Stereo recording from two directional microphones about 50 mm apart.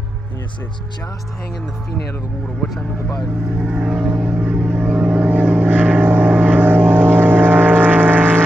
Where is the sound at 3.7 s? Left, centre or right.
Right.